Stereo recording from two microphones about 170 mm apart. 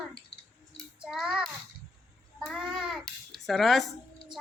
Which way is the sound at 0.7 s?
Centre (ahead or behind).